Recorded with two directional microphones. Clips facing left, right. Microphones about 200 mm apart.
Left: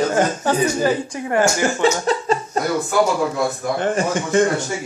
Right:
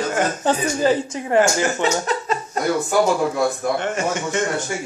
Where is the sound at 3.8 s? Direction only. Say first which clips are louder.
Left 3 dB; 35° left (ahead or behind).